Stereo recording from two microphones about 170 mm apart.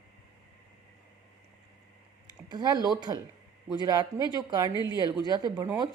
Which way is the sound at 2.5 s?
25° right (ahead or behind).